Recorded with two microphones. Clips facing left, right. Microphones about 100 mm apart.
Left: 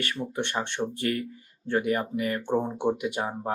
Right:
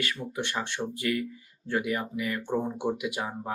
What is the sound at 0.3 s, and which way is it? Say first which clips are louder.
Speech: left 3 dB; 25° left (ahead or behind).